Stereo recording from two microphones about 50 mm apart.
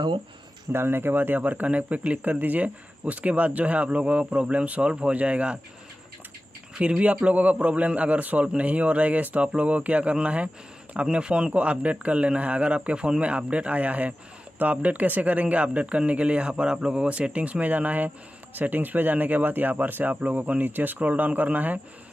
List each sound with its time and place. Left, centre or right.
0.7 s speech: right
6.7 s speech: centre; by 21.7 s right